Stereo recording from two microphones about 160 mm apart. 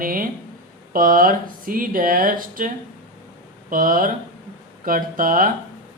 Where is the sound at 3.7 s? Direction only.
60° right (ahead or behind).